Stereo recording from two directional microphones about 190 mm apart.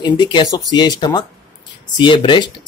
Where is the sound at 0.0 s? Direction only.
25° left (ahead or behind).